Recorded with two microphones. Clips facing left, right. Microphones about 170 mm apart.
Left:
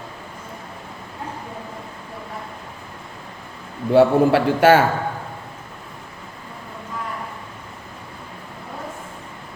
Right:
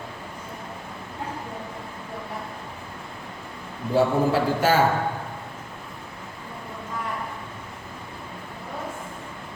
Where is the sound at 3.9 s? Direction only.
70° left (ahead or behind).